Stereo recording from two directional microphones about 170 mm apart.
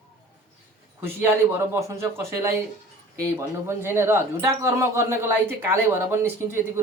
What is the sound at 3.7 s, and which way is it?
A man's voice, 15° right (ahead or behind).